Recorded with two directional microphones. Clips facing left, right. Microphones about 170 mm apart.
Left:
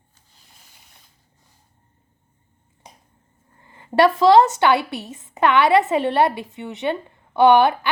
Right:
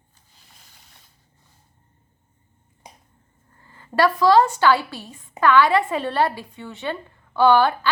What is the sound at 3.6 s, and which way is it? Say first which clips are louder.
A woman's voice: left 3 dB; 20° left (ahead or behind).